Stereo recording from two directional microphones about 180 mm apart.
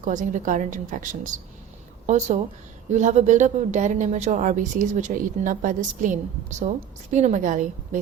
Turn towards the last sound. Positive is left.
turn(degrees=-45)  # may be behind; listen again after turning